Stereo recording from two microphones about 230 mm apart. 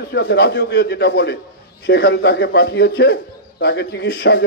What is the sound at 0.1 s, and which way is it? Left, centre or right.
A man's voice, left.